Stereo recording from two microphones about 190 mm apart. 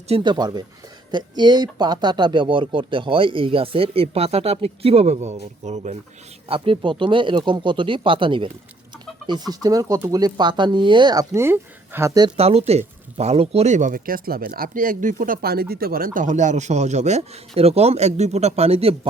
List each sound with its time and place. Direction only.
0.1 s speech: 25° right (ahead or behind)
6.5 s speech: 25° right (ahead or behind)
12.4 s speech: 30° right (ahead or behind)